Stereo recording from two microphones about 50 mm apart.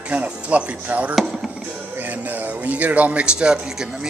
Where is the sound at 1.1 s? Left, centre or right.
Centre.